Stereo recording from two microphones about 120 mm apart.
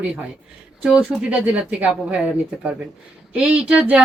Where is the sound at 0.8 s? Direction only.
10° right (ahead or behind).